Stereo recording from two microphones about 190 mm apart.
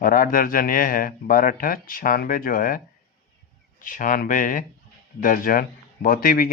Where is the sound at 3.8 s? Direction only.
45° left (ahead or behind).